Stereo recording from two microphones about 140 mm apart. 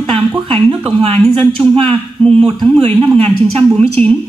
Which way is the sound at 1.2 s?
5° left (ahead or behind).